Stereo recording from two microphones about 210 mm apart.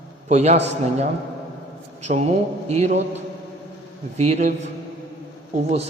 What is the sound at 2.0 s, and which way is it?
Speech, 30° right (ahead or behind).